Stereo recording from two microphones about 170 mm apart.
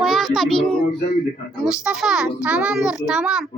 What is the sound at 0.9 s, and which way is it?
Speech, 25° left (ahead or behind).